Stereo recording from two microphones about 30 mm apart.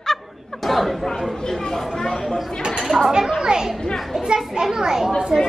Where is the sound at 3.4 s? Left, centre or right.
Right.